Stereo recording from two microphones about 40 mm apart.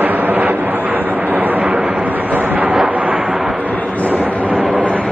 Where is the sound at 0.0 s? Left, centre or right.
Right.